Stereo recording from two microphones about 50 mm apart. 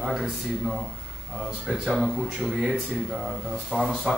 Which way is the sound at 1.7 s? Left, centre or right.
Centre.